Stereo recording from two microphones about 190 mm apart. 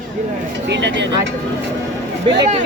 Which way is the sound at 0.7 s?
65° right (ahead or behind).